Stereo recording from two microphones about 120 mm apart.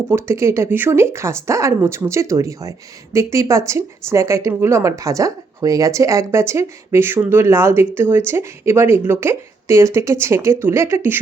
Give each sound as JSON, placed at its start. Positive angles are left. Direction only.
{"t": 0.1, "sound": "speech", "side_deg": -20}